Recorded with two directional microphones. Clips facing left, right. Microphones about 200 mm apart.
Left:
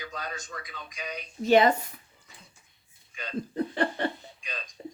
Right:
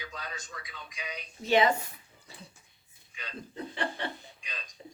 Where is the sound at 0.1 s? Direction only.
45° left (ahead or behind).